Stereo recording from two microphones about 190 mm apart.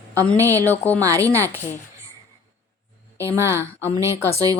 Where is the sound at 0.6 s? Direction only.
10° left (ahead or behind).